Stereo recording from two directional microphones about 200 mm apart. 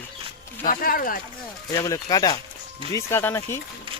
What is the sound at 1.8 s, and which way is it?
Speech, 15° left (ahead or behind).